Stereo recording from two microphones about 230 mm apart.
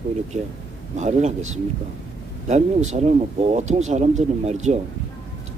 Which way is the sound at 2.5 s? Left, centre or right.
Right.